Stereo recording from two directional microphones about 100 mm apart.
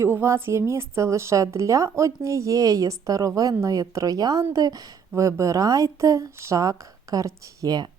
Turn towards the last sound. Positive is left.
turn(degrees=-40)  # may be behind; listen again after turning